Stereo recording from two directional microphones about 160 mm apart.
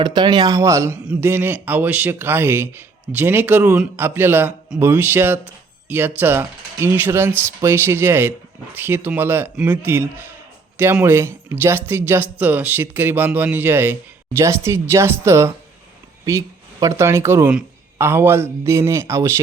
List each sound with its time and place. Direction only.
0.0 s a man's voice: 25° right (ahead or behind)
16.8 s a man's voice: 20° right (ahead or behind)